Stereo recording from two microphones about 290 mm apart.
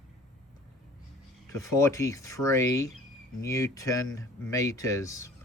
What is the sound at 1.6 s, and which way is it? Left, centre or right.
Speech, centre.